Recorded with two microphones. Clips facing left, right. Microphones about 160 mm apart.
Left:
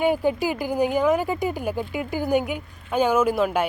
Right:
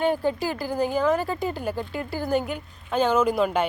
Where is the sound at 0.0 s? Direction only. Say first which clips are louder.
Left 2 dB; 10° left (ahead or behind).